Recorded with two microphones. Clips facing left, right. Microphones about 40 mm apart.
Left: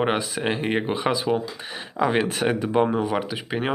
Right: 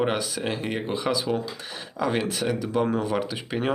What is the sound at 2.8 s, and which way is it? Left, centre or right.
Speech, centre.